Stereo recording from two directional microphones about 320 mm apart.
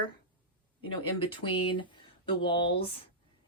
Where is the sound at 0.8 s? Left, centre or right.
Centre.